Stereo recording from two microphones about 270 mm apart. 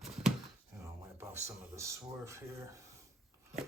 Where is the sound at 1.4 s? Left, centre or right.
Centre.